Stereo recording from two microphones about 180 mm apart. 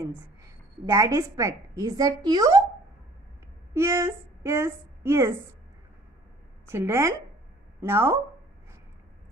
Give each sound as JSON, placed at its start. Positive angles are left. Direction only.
{"t": 0.0, "sound": "a woman's voice", "side_deg": -20}
{"t": 3.7, "sound": "a woman's voice", "side_deg": -15}
{"t": 6.7, "sound": "a woman's voice", "side_deg": -15}